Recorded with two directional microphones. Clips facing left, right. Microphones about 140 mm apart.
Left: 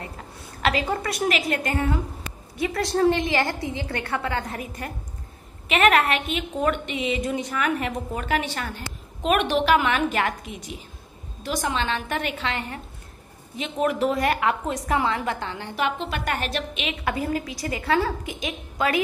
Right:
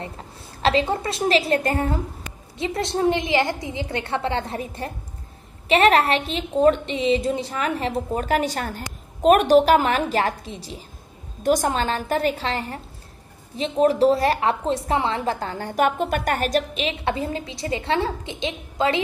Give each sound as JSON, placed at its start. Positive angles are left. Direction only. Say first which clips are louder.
{"t": 0.6, "sound": "a woman's voice", "louder": "right 4 dB", "side_deg": -30}
{"t": 2.5, "sound": "a woman's voice", "louder": "even", "side_deg": -25}
{"t": 11.4, "sound": "a woman's voice", "louder": "right 6 dB", "side_deg": -45}